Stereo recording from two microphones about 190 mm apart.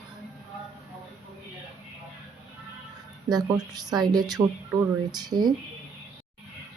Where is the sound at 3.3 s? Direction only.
20° right (ahead or behind).